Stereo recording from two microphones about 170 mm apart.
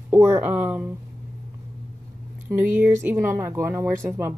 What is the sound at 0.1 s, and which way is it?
Speech, 15° right (ahead or behind).